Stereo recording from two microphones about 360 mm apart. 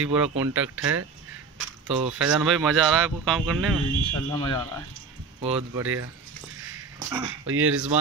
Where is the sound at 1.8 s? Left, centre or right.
Centre.